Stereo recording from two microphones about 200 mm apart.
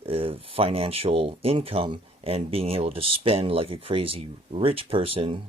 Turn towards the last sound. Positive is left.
turn(degrees=-30)  # may be behind; listen again after turning